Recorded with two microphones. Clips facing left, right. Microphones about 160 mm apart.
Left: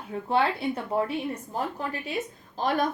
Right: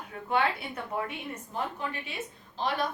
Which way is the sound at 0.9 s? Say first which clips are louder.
Left 5 dB; 30° left (ahead or behind).